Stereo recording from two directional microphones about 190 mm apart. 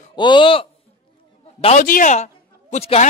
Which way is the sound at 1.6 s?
40° left (ahead or behind).